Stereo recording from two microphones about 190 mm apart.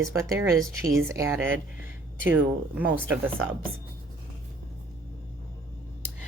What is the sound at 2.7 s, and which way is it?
Speech, 10° right (ahead or behind).